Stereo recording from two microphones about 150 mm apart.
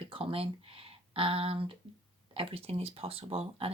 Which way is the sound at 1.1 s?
35° right (ahead or behind).